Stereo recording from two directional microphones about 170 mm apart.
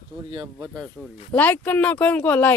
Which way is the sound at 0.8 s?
5° left (ahead or behind).